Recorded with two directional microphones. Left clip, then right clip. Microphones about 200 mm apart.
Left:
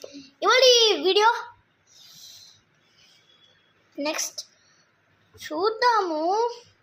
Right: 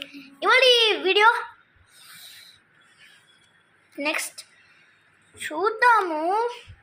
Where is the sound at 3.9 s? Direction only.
Centre (ahead or behind).